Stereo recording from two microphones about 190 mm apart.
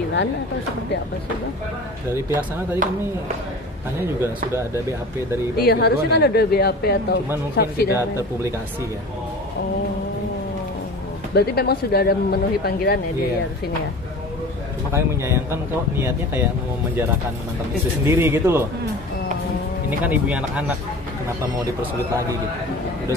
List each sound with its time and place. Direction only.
2.1 s speech: 10° right (ahead or behind)
4.0 s speech: 10° right (ahead or behind)
5.6 s speech: 55° left (ahead or behind)
11.3 s speech: 55° left (ahead or behind)
14.9 s speech: 15° right (ahead or behind)
18.0 s speech: 10° right (ahead or behind)
20.0 s speech: 10° right (ahead or behind)